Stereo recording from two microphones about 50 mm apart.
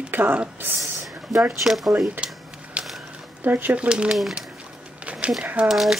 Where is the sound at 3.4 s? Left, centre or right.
Right.